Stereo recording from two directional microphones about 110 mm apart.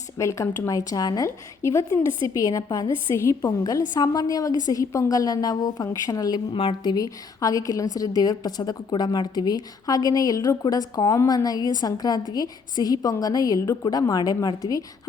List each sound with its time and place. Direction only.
0.2 s a woman's voice: 25° left (ahead or behind)
6.5 s a woman's voice: 55° left (ahead or behind)
6.9 s a woman's voice: 35° left (ahead or behind)